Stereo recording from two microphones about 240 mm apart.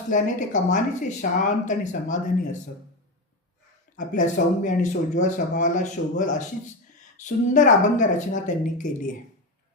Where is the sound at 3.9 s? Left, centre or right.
Left.